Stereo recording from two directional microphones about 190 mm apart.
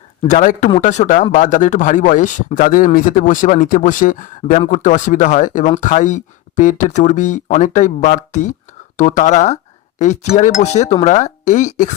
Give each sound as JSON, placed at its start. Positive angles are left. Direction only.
{"t": 0.2, "sound": "speech", "side_deg": 40}